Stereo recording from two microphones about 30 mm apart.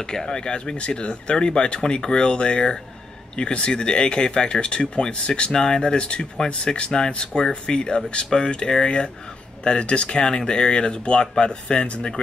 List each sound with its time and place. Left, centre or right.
0.0 s speech: left